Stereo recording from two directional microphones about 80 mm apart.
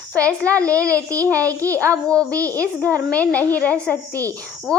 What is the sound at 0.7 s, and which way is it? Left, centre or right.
Speech, right.